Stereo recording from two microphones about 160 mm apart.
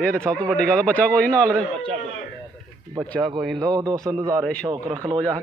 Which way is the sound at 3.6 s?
25° right (ahead or behind).